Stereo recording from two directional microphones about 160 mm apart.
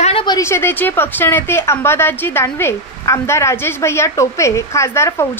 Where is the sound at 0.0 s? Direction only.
35° left (ahead or behind).